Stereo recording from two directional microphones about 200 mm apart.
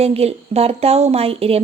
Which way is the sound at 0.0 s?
30° right (ahead or behind).